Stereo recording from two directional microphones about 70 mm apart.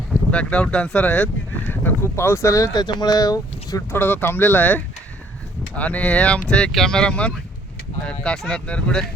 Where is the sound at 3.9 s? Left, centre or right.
Left; by 9.1 s centre.